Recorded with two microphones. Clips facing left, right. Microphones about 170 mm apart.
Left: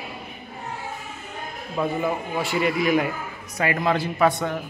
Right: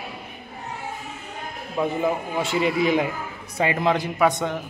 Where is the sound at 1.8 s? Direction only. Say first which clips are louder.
Right 1 dB; 5° right (ahead or behind).